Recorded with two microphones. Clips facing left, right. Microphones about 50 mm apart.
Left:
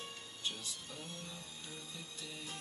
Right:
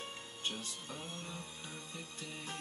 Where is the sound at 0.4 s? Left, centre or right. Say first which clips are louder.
Right 2 dB; right.